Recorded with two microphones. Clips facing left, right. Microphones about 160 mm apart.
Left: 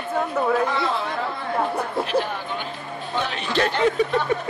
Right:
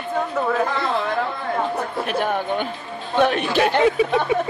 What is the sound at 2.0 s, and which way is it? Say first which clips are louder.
A man's voice: right 3 dB; 55° right (ahead or behind).